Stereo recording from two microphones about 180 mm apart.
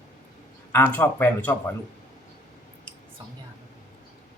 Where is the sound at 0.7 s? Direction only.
10° left (ahead or behind).